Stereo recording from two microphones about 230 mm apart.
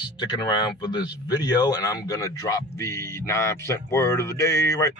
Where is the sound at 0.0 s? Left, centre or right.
Centre.